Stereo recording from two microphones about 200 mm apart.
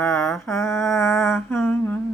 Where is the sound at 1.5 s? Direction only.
10° left (ahead or behind).